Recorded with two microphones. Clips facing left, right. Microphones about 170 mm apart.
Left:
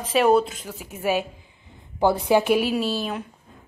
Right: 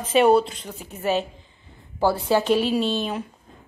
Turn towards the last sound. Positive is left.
turn(degrees=5)  # may be behind; listen again after turning